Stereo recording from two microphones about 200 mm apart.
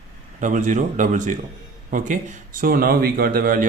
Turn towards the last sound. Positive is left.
turn(degrees=-45)  # may be behind; listen again after turning